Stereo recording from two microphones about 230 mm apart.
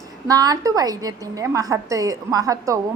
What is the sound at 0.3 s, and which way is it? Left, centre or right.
Speech, centre.